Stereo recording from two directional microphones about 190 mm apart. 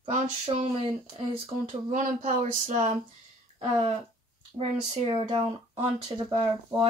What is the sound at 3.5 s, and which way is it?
Speech, 30° right (ahead or behind).